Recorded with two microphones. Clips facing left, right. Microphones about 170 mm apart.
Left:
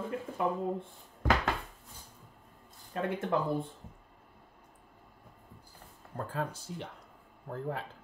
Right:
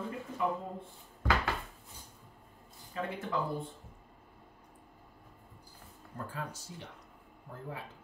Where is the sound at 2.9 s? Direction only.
55° left (ahead or behind).